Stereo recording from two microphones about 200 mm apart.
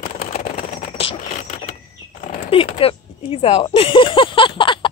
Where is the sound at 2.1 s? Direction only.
30° left (ahead or behind).